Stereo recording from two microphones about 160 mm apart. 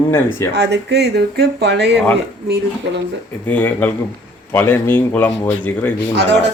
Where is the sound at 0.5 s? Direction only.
90° right.